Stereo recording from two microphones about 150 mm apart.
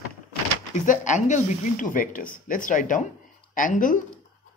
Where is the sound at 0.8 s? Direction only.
55° left (ahead or behind).